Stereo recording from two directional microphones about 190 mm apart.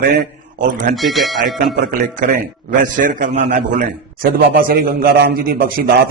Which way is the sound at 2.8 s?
45° right (ahead or behind).